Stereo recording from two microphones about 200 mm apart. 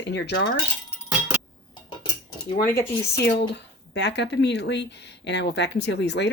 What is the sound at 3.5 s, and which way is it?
Speech, 60° left (ahead or behind).